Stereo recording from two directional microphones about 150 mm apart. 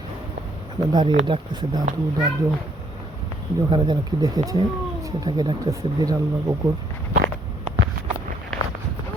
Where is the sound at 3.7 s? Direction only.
30° right (ahead or behind).